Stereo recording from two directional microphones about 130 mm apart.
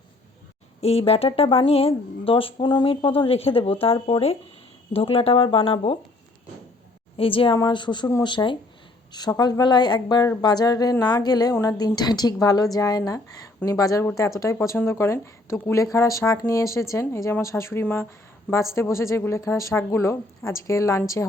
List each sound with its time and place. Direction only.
0.8 s speech: 50° left (ahead or behind)
7.2 s speech: 45° left (ahead or behind)
7.5 s speech: 35° left (ahead or behind)